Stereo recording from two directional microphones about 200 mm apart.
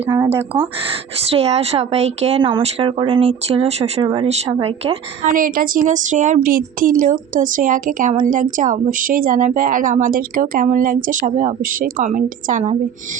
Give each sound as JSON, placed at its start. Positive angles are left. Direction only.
{"t": 0.0, "sound": "speech", "side_deg": -25}
{"t": 0.3, "sound": "speech", "side_deg": -5}
{"t": 1.3, "sound": "speech", "side_deg": -30}
{"t": 5.3, "sound": "a woman's voice", "side_deg": -45}